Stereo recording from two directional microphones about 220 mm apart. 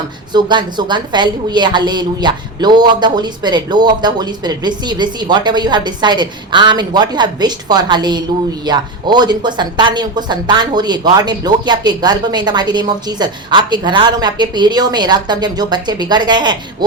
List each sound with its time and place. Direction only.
0.3 s speech: 20° right (ahead or behind)